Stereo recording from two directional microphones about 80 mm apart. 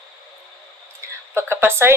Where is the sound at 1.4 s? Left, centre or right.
Right.